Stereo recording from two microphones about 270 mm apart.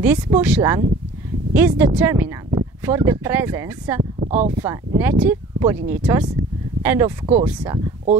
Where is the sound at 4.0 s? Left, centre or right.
Right.